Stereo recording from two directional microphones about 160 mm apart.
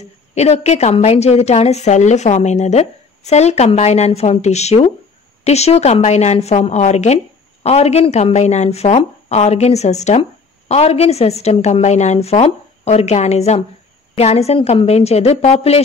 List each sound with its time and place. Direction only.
0.3 s a woman's voice: 45° left (ahead or behind)